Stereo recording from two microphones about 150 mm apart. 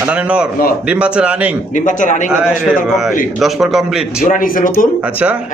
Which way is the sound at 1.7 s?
55° left (ahead or behind).